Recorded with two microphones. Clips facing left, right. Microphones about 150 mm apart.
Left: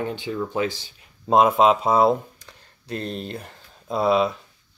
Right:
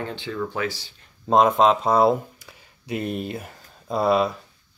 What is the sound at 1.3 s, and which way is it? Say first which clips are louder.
Speech: even; 5° left (ahead or behind).